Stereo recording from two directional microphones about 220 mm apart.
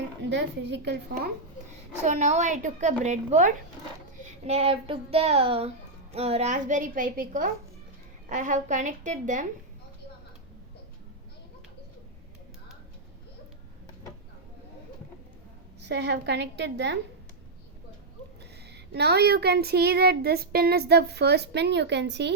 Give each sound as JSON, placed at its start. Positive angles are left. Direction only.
{"t": 0.3, "sound": "speech", "side_deg": -50}
{"t": 2.0, "sound": "a woman's voice", "side_deg": -35}
{"t": 15.8, "sound": "speech", "side_deg": -50}
{"t": 18.7, "sound": "speech", "side_deg": -50}